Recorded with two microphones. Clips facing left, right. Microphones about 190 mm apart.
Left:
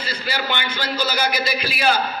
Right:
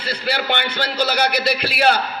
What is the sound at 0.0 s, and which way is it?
A man's voice, 65° right (ahead or behind).